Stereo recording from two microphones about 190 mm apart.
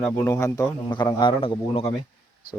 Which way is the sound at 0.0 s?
15° left (ahead or behind).